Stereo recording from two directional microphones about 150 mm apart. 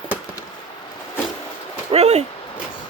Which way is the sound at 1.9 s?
45° right (ahead or behind).